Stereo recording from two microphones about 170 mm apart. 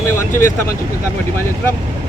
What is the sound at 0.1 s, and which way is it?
Vehicle, 15° left (ahead or behind).